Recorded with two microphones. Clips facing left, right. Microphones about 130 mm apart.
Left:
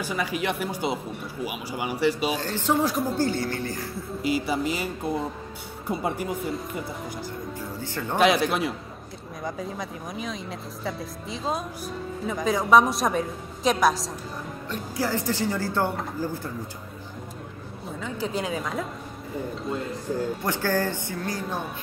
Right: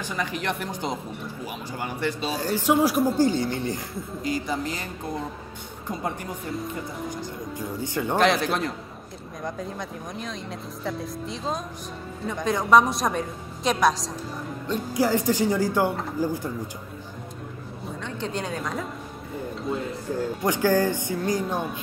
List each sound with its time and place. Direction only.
0.0 s speech: 10° left (ahead or behind)
2.4 s speech: 10° right (ahead or behind)
4.2 s speech: 10° left (ahead or behind)
7.5 s speech: 15° right (ahead or behind)
8.2 s speech: 5° left (ahead or behind)
14.7 s speech: 15° right (ahead or behind)
18.0 s speech: 5° left (ahead or behind)
20.4 s speech: 15° right (ahead or behind)